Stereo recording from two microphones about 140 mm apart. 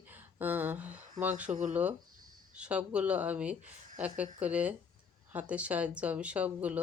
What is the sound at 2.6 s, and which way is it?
Speech, 10° right (ahead or behind).